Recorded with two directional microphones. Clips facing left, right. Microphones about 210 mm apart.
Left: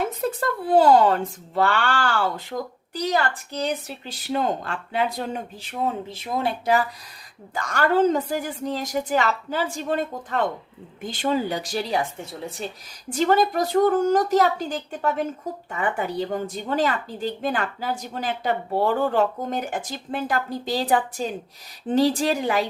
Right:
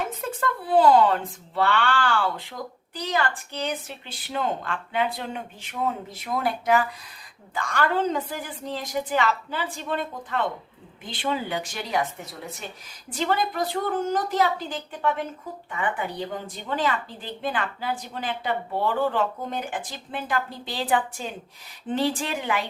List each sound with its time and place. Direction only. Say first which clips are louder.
0.2 s speech: left 4 dB; 40° left (ahead or behind)
7.5 s a woman's voice: left 4 dB; 45° left (ahead or behind)
13.1 s a woman's voice: left 6 dB; 45° left (ahead or behind)